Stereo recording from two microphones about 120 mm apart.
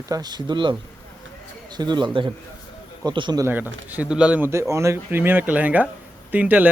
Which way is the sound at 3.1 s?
40° right (ahead or behind).